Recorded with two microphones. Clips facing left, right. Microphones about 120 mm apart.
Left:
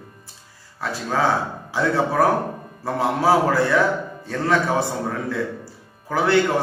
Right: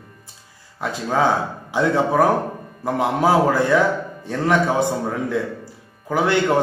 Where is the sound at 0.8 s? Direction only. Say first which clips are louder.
Right 2 dB; 20° right (ahead or behind).